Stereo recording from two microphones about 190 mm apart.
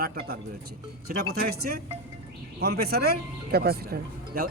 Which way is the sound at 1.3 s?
55° right (ahead or behind).